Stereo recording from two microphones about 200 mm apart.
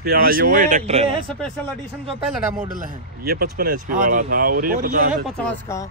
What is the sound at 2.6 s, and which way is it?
Speech, 40° right (ahead or behind).